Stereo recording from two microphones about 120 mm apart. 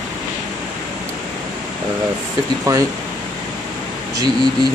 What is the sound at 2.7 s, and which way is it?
Speech, 25° right (ahead or behind).